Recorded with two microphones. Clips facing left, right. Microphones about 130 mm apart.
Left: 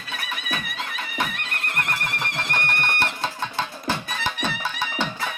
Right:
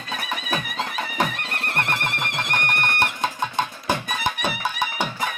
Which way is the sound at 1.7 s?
25° right (ahead or behind).